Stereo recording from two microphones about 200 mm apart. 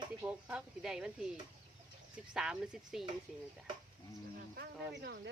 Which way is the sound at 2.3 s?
5° right (ahead or behind).